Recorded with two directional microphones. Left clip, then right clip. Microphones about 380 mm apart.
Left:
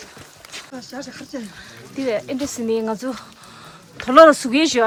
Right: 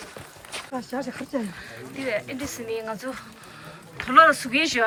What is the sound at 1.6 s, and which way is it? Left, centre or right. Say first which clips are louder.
Speech: left 6 dB; centre.